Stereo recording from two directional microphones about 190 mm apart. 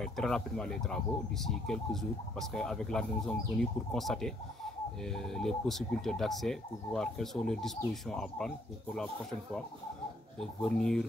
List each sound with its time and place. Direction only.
0.0 s speech: 5° left (ahead or behind)